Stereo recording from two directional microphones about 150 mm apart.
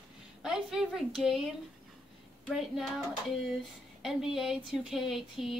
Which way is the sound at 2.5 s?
Centre (ahead or behind).